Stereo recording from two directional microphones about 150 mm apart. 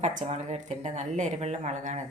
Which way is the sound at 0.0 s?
55° right (ahead or behind).